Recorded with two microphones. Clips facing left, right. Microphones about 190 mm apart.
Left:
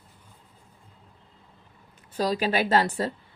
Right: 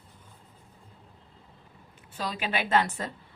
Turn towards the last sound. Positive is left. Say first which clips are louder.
# left 3 dB
turn(degrees=35)  # may be behind; listen again after turning